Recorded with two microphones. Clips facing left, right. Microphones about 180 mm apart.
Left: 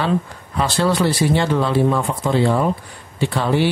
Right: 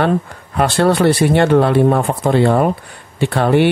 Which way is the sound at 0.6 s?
60° right (ahead or behind).